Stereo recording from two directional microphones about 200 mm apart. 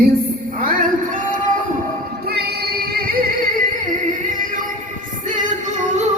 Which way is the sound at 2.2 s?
55° right (ahead or behind).